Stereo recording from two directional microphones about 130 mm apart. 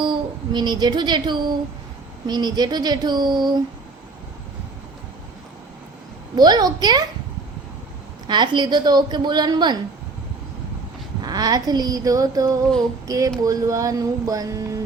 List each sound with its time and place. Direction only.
0.0 s speech: 35° right (ahead or behind)
6.3 s speech: 30° right (ahead or behind)
8.3 s speech: 35° right (ahead or behind)
11.2 s speech: 30° right (ahead or behind)